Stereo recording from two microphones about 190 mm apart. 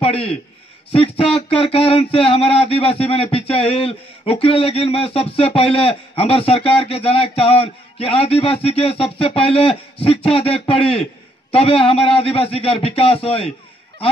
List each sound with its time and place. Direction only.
0.0 s a man's voice: 30° left (ahead or behind)